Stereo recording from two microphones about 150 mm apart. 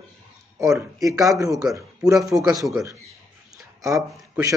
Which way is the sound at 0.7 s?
20° right (ahead or behind).